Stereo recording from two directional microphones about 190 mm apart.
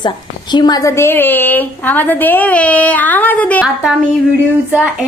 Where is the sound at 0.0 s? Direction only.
25° left (ahead or behind); by 3.7 s 10° left (ahead or behind).